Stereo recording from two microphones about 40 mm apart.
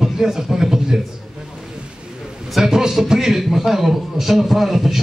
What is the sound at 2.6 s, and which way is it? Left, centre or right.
A man's voice, centre.